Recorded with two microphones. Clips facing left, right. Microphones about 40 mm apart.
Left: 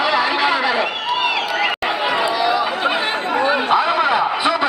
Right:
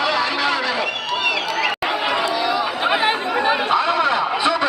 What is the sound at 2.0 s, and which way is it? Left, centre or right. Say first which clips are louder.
Chatter: left 3 dB; centre.